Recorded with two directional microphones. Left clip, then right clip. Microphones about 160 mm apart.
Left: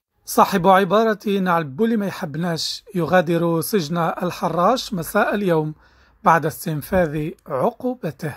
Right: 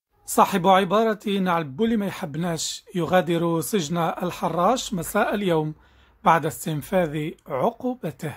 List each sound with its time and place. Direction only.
0.3 s speech: 25° left (ahead or behind)